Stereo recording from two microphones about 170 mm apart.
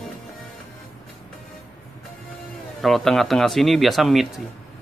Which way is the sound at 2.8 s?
Centre (ahead or behind).